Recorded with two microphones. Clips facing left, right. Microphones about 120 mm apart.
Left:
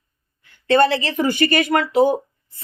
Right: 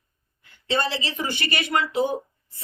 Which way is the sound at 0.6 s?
60° left (ahead or behind).